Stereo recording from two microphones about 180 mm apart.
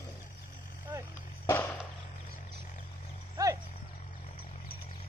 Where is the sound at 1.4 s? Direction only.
15° left (ahead or behind).